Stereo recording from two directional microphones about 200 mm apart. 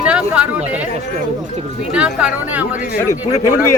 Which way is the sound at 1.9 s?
5° right (ahead or behind).